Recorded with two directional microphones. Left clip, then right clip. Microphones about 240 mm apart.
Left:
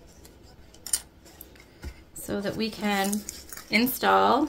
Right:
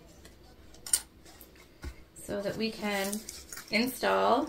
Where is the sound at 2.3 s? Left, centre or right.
Left.